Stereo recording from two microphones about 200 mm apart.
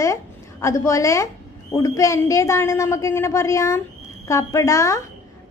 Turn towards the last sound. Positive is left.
turn(degrees=15)  # may be behind; listen again after turning